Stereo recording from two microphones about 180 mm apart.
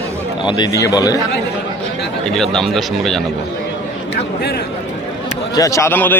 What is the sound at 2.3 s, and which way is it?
Speech, centre (ahead or behind).